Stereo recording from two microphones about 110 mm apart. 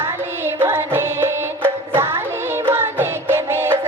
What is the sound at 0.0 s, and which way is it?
Music, 20° right (ahead or behind).